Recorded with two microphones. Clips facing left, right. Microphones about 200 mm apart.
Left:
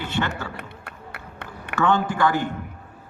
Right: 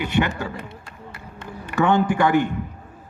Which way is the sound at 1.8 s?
15° right (ahead or behind).